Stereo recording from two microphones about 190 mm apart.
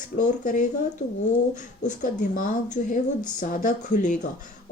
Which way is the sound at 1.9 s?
40° left (ahead or behind).